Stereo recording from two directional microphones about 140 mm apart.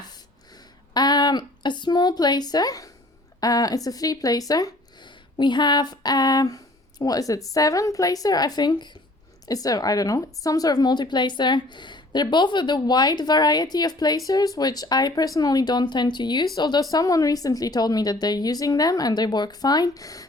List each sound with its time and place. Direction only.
0.5 s a woman's voice: 30° left (ahead or behind)